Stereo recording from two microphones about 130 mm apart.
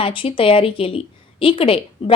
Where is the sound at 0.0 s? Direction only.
45° left (ahead or behind).